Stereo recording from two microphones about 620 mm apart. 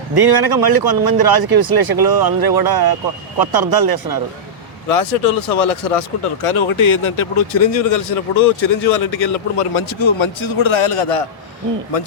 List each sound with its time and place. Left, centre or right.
0.2 s speech: right
4.9 s speech: left